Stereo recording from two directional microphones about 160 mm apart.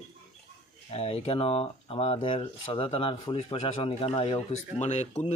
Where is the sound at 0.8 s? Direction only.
35° left (ahead or behind).